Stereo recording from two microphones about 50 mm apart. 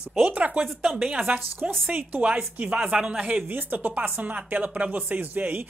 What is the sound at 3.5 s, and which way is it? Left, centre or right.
Speech, right.